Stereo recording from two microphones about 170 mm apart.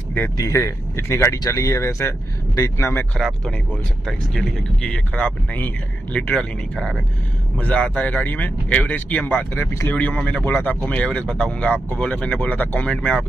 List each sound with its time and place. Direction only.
0.1 s speech: 15° left (ahead or behind)
3.2 s speech: centre (ahead or behind)